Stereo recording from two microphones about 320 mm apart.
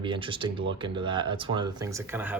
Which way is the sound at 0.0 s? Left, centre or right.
Centre.